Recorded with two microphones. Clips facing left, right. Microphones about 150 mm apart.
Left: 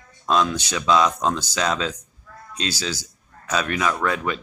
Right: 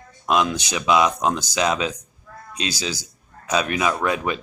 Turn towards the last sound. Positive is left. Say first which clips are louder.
# right 1 dB
turn(degrees=-15)  # may be behind; listen again after turning